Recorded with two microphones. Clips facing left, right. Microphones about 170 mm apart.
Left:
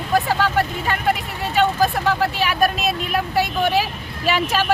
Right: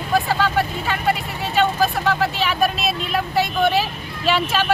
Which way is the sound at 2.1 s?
10° left (ahead or behind).